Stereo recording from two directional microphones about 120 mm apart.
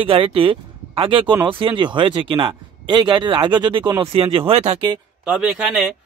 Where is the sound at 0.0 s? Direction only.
50° right (ahead or behind).